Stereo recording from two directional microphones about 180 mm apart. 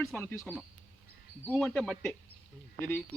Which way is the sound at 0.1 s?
5° left (ahead or behind).